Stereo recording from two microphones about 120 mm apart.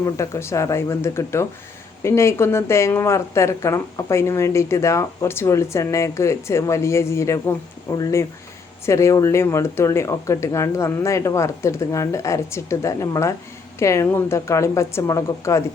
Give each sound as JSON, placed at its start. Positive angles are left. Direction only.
{"t": 0.0, "sound": "speech", "side_deg": 25}